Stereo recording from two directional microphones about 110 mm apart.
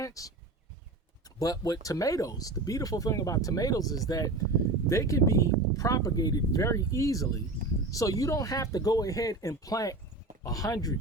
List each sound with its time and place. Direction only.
0.0 s speech: 30° left (ahead or behind)
1.4 s speech: 35° left (ahead or behind)